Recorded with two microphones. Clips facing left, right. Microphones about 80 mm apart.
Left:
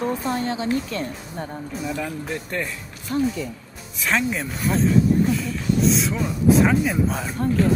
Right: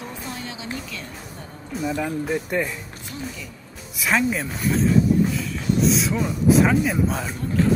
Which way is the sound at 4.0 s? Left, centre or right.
Centre.